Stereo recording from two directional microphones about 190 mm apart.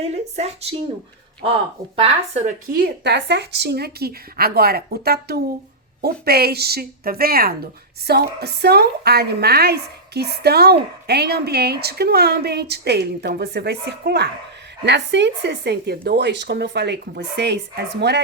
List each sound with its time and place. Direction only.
0.0 s speech: 35° right (ahead or behind)
2.0 s speech: 35° right (ahead or behind)
2.6 s a woman's voice: 55° right (ahead or behind)